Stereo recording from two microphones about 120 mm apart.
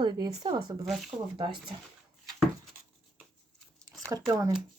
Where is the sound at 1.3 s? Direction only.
45° right (ahead or behind).